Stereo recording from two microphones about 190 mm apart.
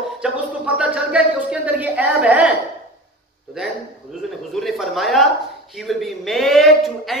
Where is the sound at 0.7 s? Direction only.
5° right (ahead or behind).